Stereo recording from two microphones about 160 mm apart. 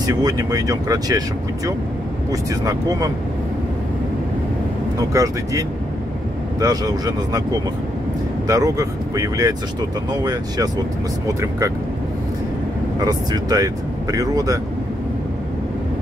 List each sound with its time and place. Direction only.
0.0 s speech: 25° right (ahead or behind)
2.6 s speech: 25° right (ahead or behind)
5.1 s speech: 20° right (ahead or behind)
8.5 s speech: 20° right (ahead or behind)
13.0 s speech: 25° right (ahead or behind)